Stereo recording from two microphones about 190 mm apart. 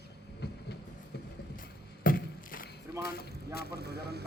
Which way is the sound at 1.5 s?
50° left (ahead or behind).